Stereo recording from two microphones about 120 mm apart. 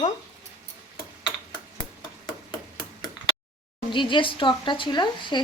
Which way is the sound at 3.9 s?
45° left (ahead or behind).